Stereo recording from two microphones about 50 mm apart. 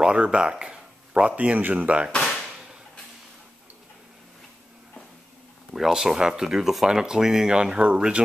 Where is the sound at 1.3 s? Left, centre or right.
Right.